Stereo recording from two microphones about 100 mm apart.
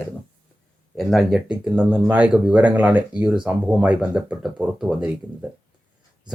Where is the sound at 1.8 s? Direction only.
20° right (ahead or behind).